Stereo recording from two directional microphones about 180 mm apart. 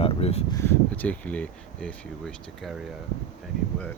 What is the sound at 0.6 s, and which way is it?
Speech, 10° left (ahead or behind).